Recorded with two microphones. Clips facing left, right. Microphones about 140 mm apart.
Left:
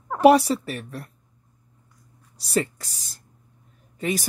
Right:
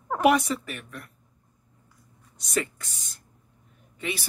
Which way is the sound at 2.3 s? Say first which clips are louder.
Left 4 dB; 35° left (ahead or behind).